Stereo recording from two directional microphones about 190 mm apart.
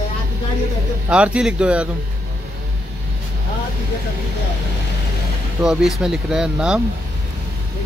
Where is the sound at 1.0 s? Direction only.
5° right (ahead or behind).